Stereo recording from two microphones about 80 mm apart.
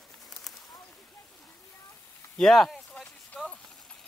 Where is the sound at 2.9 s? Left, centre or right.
Centre.